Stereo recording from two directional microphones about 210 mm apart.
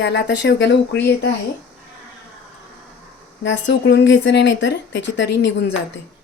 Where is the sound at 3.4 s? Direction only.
60° left (ahead or behind).